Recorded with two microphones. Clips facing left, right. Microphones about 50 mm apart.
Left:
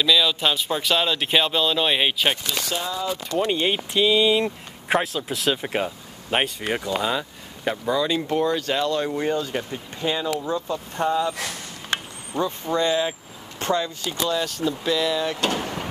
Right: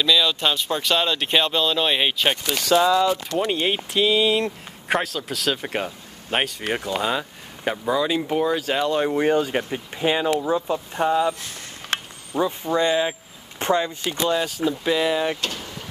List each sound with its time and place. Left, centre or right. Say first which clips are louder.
0.0 s speech: even; centre
2.6 s speech: right 10 dB; right
3.3 s speech: even; centre
8.9 s speech: right 4 dB; right
12.4 s speech: right 2 dB; centre; by 14.4 s right
14.4 s speech: right 2 dB; centre
14.9 s speech: right 2 dB; right
15.5 s vehicle: left 7 dB; left